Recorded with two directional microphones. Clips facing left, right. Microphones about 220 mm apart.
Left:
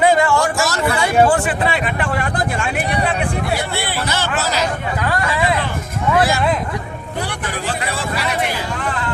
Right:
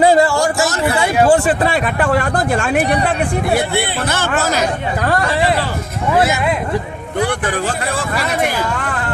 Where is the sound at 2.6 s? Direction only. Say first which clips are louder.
Right 5 dB; 50° right (ahead or behind); by 5.6 s 35° right (ahead or behind).